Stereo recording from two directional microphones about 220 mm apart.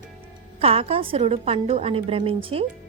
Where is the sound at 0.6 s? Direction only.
25° right (ahead or behind).